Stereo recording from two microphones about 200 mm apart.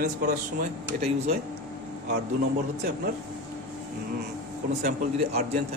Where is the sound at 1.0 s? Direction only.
35° right (ahead or behind).